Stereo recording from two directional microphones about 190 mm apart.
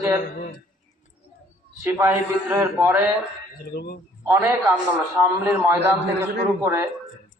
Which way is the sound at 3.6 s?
55° left (ahead or behind).